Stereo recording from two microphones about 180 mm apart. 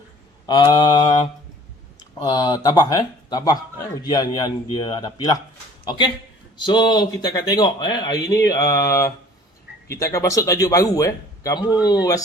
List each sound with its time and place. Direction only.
0.4 s mantra: 20° left (ahead or behind)
2.2 s a man's voice: 20° left (ahead or behind)